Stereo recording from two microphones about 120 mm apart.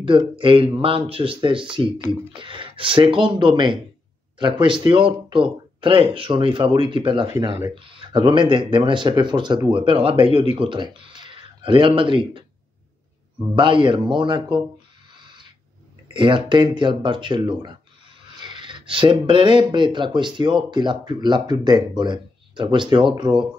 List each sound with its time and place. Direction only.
0.4 s speech: 50° right (ahead or behind)
7.3 s speech: 25° right (ahead or behind)
7.7 s speech: 45° right (ahead or behind)
13.6 s speech: 45° right (ahead or behind)
15.1 s a sound: 40° right (ahead or behind)
16.1 s speech: 45° right (ahead or behind)